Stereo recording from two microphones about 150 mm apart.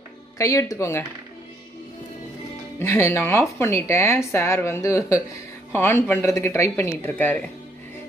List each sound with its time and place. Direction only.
0.4 s speech: 20° left (ahead or behind)
2.8 s speech: 15° left (ahead or behind)